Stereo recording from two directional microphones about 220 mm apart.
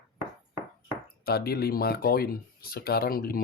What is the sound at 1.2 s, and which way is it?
Speech, 45° left (ahead or behind).